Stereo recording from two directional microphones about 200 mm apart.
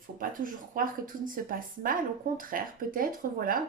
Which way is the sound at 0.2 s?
45° right (ahead or behind).